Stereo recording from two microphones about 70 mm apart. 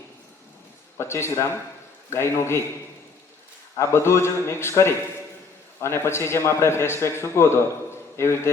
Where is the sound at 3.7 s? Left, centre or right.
Left.